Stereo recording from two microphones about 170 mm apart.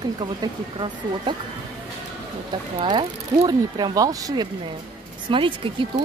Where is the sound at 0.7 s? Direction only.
30° right (ahead or behind).